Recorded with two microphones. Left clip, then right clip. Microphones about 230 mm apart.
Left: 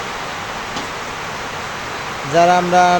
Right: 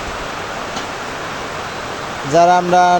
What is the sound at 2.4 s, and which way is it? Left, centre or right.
Speech, centre.